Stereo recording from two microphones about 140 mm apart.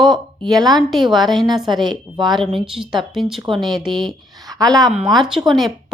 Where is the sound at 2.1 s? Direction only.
Centre (ahead or behind).